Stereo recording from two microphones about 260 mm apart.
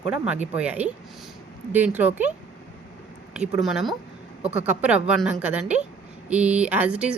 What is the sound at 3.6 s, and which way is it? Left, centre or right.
A woman's voice, centre.